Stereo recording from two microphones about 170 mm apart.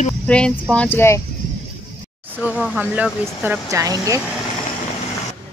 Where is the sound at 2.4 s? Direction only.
5° right (ahead or behind).